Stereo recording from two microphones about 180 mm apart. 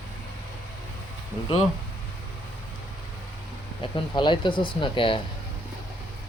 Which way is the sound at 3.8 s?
25° left (ahead or behind).